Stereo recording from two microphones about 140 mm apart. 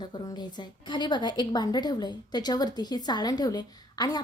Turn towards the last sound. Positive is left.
turn(degrees=30)  # may be behind; listen again after turning